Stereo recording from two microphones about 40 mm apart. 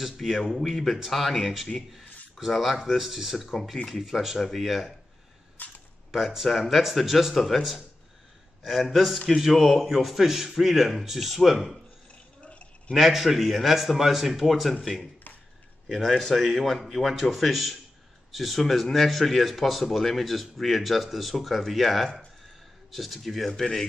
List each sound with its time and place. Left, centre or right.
0.0 s speech: centre
3.7 s speech: centre
4.0 s speech: centre
5.6 s cap gun: left
6.1 s speech: centre
8.6 s speech: centre
12.4 s a sound: left
12.9 s speech: centre